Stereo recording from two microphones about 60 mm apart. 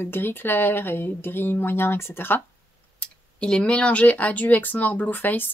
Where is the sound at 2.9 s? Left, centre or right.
Centre; by 5.4 s left.